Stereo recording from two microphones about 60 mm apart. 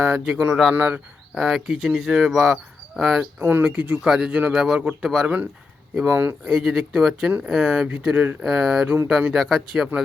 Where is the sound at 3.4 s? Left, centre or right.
Right.